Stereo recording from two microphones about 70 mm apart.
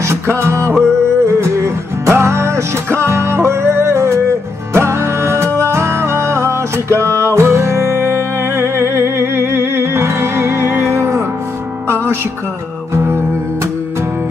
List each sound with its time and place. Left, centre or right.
0.0 s music: right